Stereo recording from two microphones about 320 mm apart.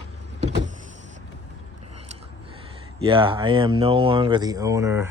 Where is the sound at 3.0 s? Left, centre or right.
Centre.